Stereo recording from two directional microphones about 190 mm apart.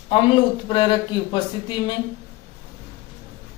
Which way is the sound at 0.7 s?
25° left (ahead or behind).